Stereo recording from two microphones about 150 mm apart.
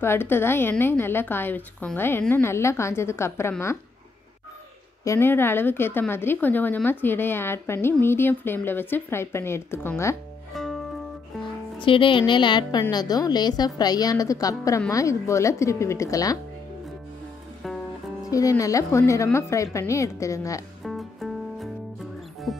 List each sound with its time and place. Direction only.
0.0 s a woman's voice: 15° left (ahead or behind)
5.0 s a woman's voice: 15° left (ahead or behind)
10.5 s music: centre (ahead or behind)
11.8 s a woman's voice: 35° left (ahead or behind)
18.3 s a woman's voice: 20° left (ahead or behind)
20.8 s music: centre (ahead or behind)